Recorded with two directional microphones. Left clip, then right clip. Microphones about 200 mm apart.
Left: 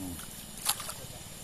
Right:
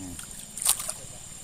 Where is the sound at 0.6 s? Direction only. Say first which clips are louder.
Right 4 dB; 55° right (ahead or behind).